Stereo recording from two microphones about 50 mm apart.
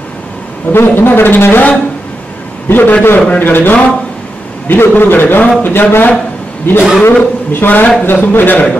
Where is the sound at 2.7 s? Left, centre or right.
Left.